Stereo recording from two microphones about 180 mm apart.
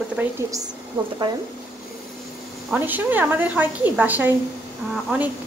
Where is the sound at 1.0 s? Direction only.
25° right (ahead or behind).